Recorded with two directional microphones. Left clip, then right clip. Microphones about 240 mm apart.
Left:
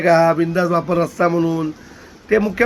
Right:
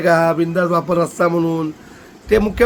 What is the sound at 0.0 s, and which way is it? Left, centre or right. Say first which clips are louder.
A man's voice: left 1 dB; centre.